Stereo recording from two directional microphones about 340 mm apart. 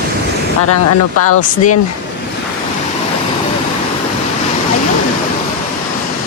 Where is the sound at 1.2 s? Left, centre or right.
Left.